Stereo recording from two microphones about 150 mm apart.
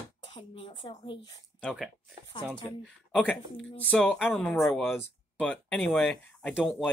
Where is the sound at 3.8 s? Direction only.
10° left (ahead or behind).